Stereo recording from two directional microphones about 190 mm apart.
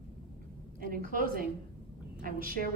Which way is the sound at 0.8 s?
50° right (ahead or behind).